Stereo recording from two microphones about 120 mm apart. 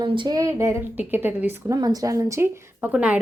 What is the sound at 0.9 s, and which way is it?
Speech, 15° right (ahead or behind).